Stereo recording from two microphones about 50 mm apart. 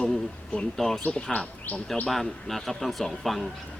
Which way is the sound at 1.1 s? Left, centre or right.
Left.